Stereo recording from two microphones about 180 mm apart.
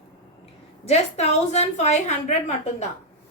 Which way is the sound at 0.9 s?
35° left (ahead or behind).